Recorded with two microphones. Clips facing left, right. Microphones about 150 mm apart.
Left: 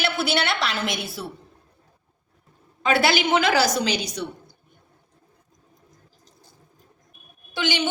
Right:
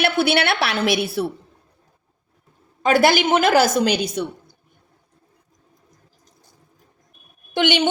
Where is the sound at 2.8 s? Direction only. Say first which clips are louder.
Right 5 dB; 45° right (ahead or behind).